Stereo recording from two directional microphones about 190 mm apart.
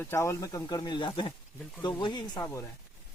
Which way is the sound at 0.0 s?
15° left (ahead or behind).